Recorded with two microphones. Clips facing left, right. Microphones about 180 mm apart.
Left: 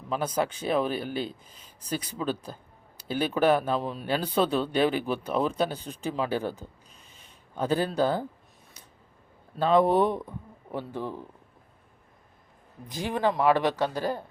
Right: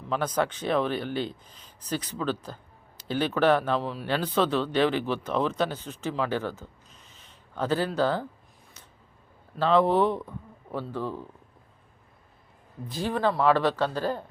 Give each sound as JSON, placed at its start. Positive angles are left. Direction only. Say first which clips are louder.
{"t": 0.1, "sound": "a man's voice", "louder": "right 1 dB", "side_deg": 10}
{"t": 9.6, "sound": "a man's voice", "louder": "even", "side_deg": 15}
{"t": 12.9, "sound": "a man's voice", "louder": "even", "side_deg": 15}